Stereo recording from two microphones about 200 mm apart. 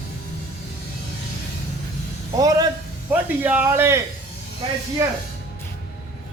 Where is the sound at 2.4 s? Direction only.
20° right (ahead or behind).